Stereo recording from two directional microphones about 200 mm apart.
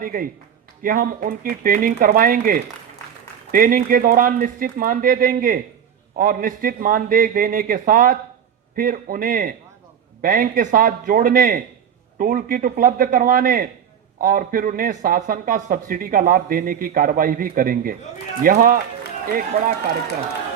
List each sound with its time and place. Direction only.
0.0 s a man's voice: 45° right (ahead or behind)